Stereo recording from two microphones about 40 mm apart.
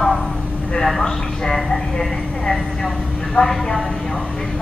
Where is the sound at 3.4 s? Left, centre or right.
Left.